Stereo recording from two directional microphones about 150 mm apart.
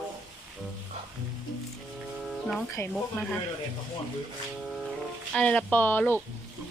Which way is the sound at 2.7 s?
15° left (ahead or behind).